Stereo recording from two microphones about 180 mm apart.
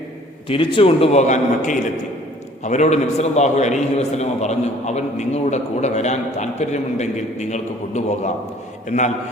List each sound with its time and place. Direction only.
0.4 s a man's voice: 30° left (ahead or behind)